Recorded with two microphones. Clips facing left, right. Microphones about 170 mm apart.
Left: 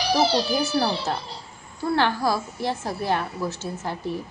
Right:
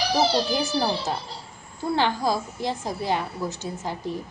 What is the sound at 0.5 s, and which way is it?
A woman's voice, 15° right (ahead or behind).